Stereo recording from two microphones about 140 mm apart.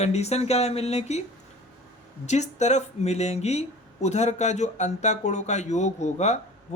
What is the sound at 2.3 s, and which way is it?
Speech, 55° left (ahead or behind).